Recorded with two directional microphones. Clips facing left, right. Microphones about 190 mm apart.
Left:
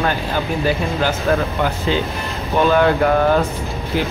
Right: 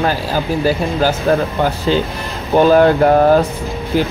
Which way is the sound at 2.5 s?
35° right (ahead or behind).